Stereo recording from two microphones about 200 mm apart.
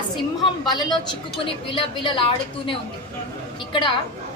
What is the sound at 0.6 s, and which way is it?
A woman's voice, 20° left (ahead or behind).